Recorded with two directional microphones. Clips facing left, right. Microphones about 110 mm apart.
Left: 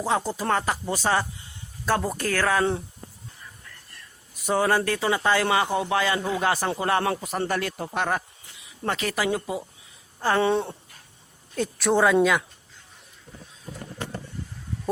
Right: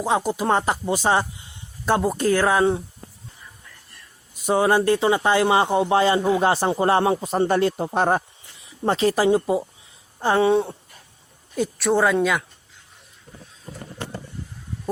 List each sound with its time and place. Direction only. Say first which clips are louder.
0.0 s speech: right 4 dB; 15° right (ahead or behind)
4.4 s speech: right 4 dB; 20° right (ahead or behind)
10.2 s a sound: right 4 dB; 20° right (ahead or behind)
11.5 s speech: right 2 dB; 5° right (ahead or behind)